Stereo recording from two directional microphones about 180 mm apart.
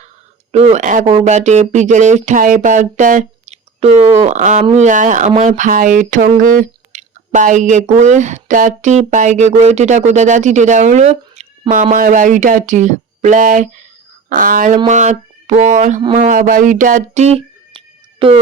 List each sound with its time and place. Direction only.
0.5 s speech: 40° right (ahead or behind)
11.7 s speech: 50° right (ahead or behind); by 18.3 s 30° right (ahead or behind)